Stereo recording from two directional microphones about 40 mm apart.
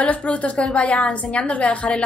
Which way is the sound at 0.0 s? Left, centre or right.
Left.